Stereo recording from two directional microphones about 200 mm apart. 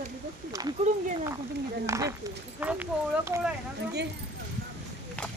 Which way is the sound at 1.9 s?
15° right (ahead or behind).